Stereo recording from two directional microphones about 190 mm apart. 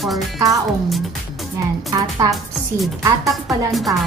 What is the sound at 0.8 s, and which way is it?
Music, centre (ahead or behind).